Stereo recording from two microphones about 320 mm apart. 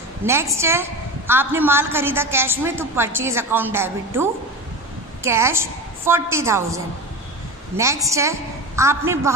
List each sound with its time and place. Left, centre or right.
0.2 s a woman's voice: centre